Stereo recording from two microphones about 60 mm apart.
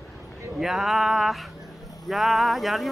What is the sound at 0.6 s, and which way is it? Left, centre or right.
Speech, centre.